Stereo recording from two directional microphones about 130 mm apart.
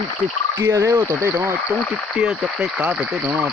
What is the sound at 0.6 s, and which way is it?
Speech, 20° right (ahead or behind).